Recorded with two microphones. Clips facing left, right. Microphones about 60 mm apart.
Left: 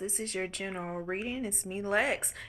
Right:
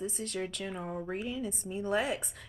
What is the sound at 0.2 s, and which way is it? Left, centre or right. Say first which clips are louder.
Speech: left 1 dB; left.